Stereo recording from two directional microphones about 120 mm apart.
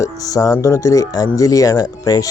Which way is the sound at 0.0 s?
30° left (ahead or behind).